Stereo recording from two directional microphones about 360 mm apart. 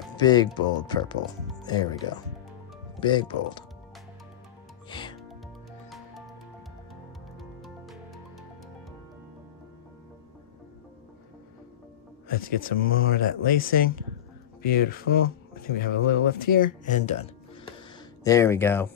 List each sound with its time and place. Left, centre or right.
0.2 s speech: centre
4.8 s music: centre
5.9 s music: centre
7.3 s music: centre
12.3 s speech: left
17.7 s a sound: centre